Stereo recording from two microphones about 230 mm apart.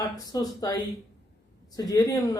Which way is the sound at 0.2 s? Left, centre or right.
Centre.